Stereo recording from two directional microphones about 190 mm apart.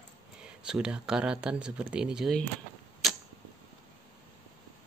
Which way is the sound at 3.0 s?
Centre (ahead or behind).